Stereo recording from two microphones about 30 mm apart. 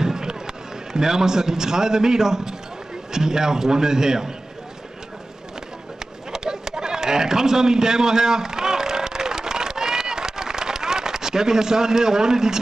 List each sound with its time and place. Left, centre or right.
0.0 s fireworks: right
0.9 s a man's voice: centre
6.3 s a sound: centre